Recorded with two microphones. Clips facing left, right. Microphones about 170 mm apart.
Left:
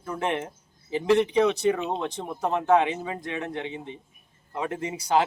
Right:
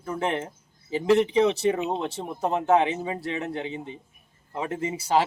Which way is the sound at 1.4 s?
25° right (ahead or behind).